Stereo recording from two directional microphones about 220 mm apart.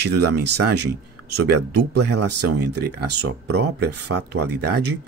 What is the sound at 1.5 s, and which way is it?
Speech, 50° right (ahead or behind).